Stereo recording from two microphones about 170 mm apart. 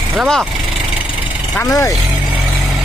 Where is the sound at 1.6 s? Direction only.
20° left (ahead or behind).